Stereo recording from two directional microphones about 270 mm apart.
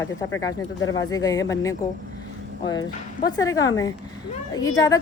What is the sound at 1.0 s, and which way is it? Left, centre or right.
A woman's voice, centre.